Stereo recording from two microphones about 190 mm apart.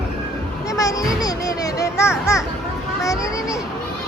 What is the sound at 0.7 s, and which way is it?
Music, 20° left (ahead or behind).